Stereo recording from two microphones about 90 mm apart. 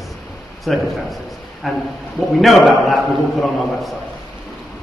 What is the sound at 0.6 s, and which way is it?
A man's voice, centre (ahead or behind).